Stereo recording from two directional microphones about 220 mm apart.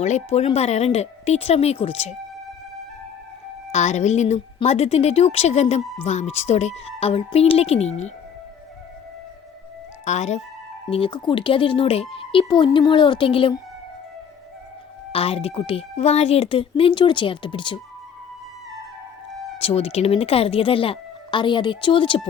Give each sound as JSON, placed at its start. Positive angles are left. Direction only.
{"t": 0.0, "sound": "speech", "side_deg": 30}
{"t": 3.7, "sound": "speech", "side_deg": 30}
{"t": 10.1, "sound": "speech", "side_deg": 30}
{"t": 15.1, "sound": "speech", "side_deg": 25}
{"t": 19.5, "sound": "speech", "side_deg": 25}